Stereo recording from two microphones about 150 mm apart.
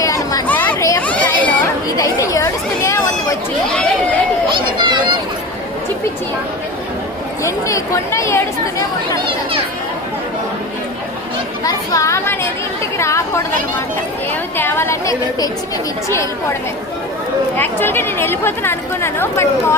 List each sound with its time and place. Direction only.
0.0 s a sound: 20° left (ahead or behind)
0.4 s children playing: 10° left (ahead or behind)
2.0 s chatter: 20° left (ahead or behind)
3.8 s a sound: 10° left (ahead or behind)
4.4 s a sound: 30° right (ahead or behind)
7.4 s speech: 20° left (ahead or behind)
11.6 s a woman's voice: 20° left (ahead or behind)
13.0 s chatter: 20° left (ahead or behind)
14.5 s a woman's voice: 15° left (ahead or behind)
17.6 s speech: 15° left (ahead or behind)